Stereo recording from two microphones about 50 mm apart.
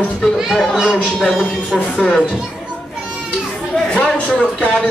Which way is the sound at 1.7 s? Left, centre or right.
Centre.